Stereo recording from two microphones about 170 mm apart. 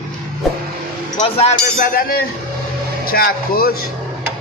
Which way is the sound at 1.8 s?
55° left (ahead or behind).